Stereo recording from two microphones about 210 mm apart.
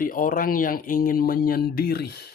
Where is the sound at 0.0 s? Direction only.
40° left (ahead or behind).